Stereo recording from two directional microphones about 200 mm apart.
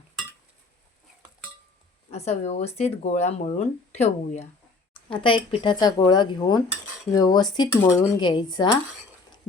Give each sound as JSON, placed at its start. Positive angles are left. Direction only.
{"t": 2.0, "sound": "speech", "side_deg": 35}